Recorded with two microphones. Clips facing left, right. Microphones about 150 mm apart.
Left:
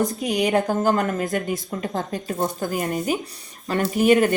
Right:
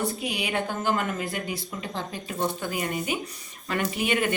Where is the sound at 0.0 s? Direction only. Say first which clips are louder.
Left 8 dB; 40° left (ahead or behind).